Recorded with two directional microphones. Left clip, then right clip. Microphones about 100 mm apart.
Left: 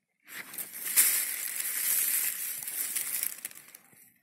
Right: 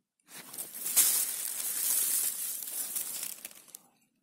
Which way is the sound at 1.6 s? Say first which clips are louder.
Left 1 dB; 90° right.